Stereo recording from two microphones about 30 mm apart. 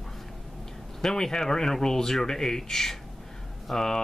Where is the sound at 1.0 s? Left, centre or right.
Centre.